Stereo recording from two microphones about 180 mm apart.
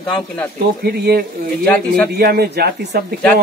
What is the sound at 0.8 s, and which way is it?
Speech, 60° right (ahead or behind).